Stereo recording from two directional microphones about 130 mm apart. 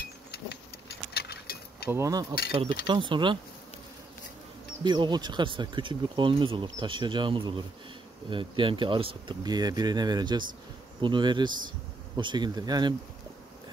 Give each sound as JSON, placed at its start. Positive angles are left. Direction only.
{"t": 1.9, "sound": "speech", "side_deg": -25}
{"t": 2.5, "sound": "speech", "side_deg": -40}
{"t": 4.8, "sound": "speech", "side_deg": -35}